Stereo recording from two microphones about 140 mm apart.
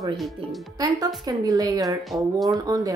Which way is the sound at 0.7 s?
25° right (ahead or behind).